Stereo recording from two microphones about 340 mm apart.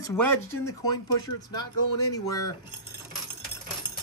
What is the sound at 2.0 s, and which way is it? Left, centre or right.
Speech, left.